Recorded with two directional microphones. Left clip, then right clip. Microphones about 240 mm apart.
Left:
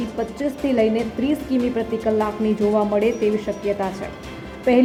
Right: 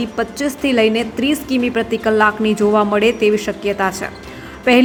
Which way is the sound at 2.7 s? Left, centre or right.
Right.